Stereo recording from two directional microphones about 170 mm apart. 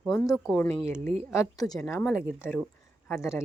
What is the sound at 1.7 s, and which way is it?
Speech, centre (ahead or behind).